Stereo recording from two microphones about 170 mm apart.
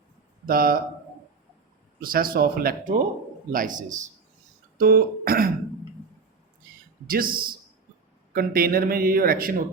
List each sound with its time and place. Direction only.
0.4 s speech: 60° right (ahead or behind)
2.0 s a man's voice: 55° right (ahead or behind)
4.8 s speech: 60° right (ahead or behind)
7.1 s speech: 55° right (ahead or behind)